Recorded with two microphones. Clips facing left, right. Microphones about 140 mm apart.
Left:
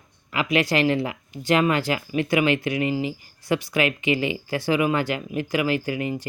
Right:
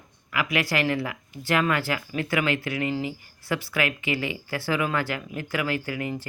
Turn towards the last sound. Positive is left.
turn(degrees=20)  # may be behind; listen again after turning